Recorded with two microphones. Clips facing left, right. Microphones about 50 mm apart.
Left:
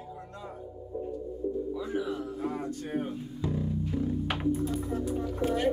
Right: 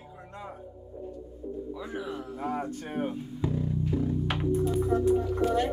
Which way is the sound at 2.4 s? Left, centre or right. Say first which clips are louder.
Right 1 dB; right.